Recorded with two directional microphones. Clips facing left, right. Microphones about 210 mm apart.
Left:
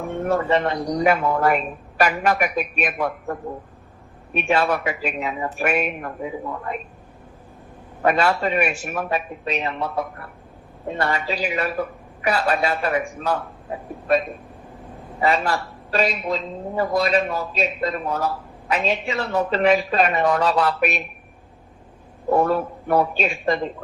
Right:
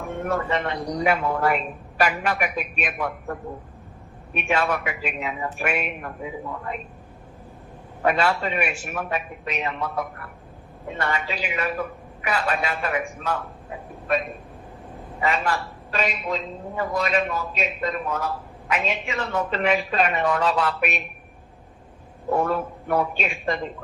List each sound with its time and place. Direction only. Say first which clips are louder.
0.0 s speech: left 4 dB; 30° left (ahead or behind)
4.4 s speech: left 3 dB; 35° left (ahead or behind)
8.0 s speech: left 3 dB; 40° left (ahead or behind)
15.2 s speech: left 3 dB; 35° left (ahead or behind)
22.3 s speech: left 4 dB; 35° left (ahead or behind)